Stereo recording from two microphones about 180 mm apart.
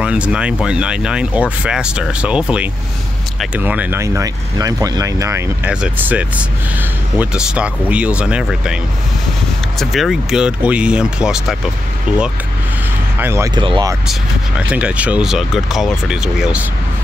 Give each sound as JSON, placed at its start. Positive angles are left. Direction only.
{"t": 0.0, "sound": "speech", "side_deg": -5}
{"t": 9.8, "sound": "speech", "side_deg": 0}
{"t": 13.2, "sound": "speech", "side_deg": -15}
{"t": 13.6, "sound": "speech", "side_deg": -25}
{"t": 14.7, "sound": "speech", "side_deg": -5}